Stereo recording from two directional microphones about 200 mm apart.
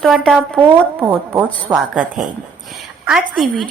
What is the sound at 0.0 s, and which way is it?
A woman's voice, centre (ahead or behind).